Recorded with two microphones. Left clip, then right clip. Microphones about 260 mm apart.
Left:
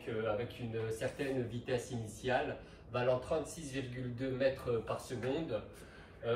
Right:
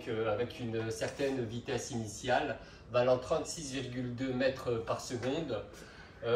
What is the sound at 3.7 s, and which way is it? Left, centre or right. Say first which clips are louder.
Speech: right 3 dB; centre.